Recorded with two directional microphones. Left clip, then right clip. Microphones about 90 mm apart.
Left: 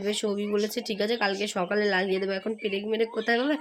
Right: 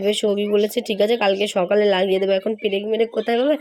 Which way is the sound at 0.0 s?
40° right (ahead or behind).